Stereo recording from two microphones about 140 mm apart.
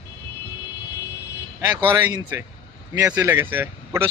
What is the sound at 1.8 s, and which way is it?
Speech, 20° right (ahead or behind).